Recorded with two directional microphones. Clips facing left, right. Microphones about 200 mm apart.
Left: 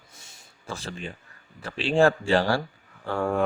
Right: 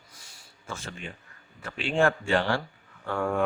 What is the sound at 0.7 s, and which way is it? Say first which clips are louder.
A man's voice: left 3 dB; 35° left (ahead or behind).